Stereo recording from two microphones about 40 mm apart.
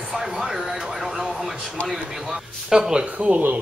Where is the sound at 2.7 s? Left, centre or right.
Centre.